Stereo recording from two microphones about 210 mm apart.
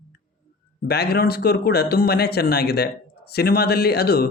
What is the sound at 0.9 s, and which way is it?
Speech, 50° left (ahead or behind).